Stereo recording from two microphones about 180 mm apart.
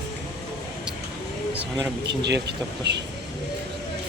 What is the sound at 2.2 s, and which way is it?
Speech, 70° right (ahead or behind).